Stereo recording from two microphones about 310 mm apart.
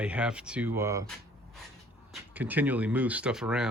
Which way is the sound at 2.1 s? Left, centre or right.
Centre.